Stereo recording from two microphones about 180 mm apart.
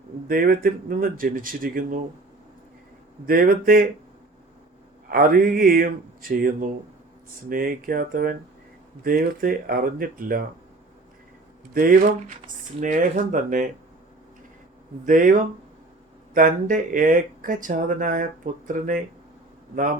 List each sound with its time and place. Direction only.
0.3 s speech: 55° right (ahead or behind)
3.2 s speech: 55° right (ahead or behind)
5.0 s speech: 50° right (ahead or behind)
11.7 s speech: 50° right (ahead or behind)
15.0 s speech: 45° right (ahead or behind)